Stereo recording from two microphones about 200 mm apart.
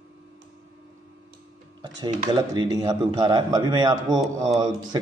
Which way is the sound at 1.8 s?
20° right (ahead or behind).